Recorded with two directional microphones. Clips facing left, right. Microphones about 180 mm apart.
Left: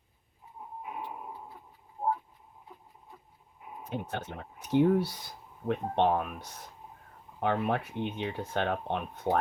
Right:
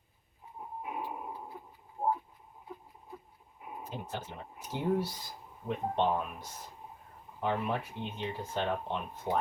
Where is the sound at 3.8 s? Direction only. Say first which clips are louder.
Left 5 dB; 65° left (ahead or behind).